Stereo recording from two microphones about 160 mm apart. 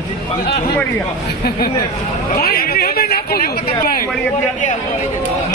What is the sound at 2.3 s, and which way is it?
A man's voice, 75° left (ahead or behind).